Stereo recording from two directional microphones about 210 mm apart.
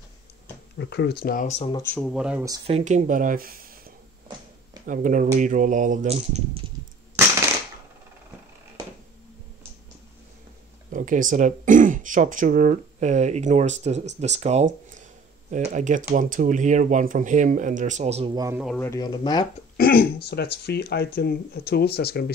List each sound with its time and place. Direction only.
0.7 s speech: 50° left (ahead or behind); by 1.8 s 30° left (ahead or behind)
1.8 s speech: 10° left (ahead or behind)
2.6 s speech: 30° right (ahead or behind)
10.9 s speech: 40° right (ahead or behind)
18.3 s speech: 15° right (ahead or behind)
18.8 s speech: 15° left (ahead or behind)
19.8 s speech: 45° left (ahead or behind)